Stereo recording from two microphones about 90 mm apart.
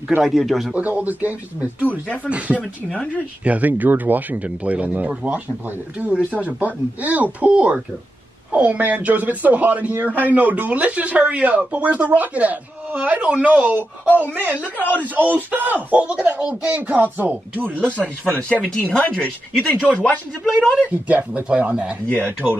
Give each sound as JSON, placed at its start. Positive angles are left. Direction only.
{"t": 0.2, "sound": "a man's voice", "side_deg": 0}
{"t": 0.7, "sound": "a man's voice", "side_deg": -20}
{"t": 1.9, "sound": "speech", "side_deg": 20}
{"t": 2.2, "sound": "a man's voice", "side_deg": -15}
{"t": 2.6, "sound": "speech", "side_deg": 10}
{"t": 3.4, "sound": "a man's voice", "side_deg": -15}
{"t": 14.8, "sound": "speech", "side_deg": 20}
{"t": 15.0, "sound": "a man's voice", "side_deg": -20}
{"t": 18.5, "sound": "speech", "side_deg": 15}
{"t": 20.9, "sound": "a man's voice", "side_deg": -15}
{"t": 22.0, "sound": "speech", "side_deg": 15}